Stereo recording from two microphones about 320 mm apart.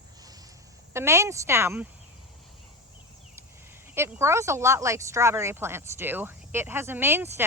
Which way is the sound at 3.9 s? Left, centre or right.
Centre.